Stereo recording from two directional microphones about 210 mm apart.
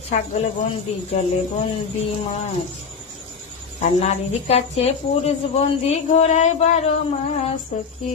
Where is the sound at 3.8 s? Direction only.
30° left (ahead or behind).